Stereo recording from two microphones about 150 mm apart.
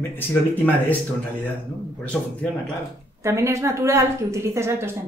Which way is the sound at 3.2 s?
20° right (ahead or behind).